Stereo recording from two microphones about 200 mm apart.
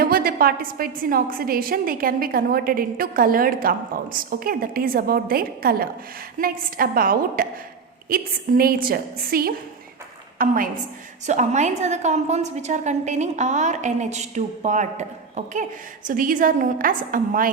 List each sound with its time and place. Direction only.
0.0 s a woman's voice: 50° right (ahead or behind)